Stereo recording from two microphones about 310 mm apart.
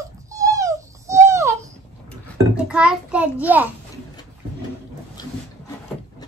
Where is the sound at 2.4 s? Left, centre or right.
Centre.